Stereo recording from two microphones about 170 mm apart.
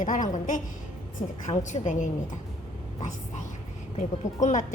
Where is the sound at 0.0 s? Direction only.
50° left (ahead or behind).